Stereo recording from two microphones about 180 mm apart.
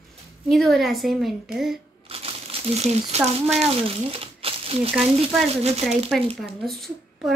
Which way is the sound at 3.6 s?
35° right (ahead or behind).